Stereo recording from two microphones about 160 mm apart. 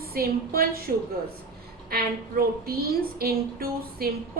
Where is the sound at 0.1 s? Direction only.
65° right (ahead or behind).